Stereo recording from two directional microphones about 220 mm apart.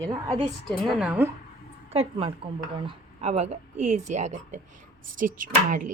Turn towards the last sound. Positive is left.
turn(degrees=-35)  # may be behind; listen again after turning